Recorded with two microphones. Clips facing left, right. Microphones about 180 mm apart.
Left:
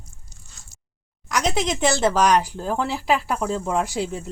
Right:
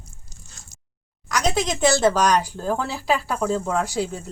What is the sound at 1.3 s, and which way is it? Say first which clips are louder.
Speech: even; 25° left (ahead or behind).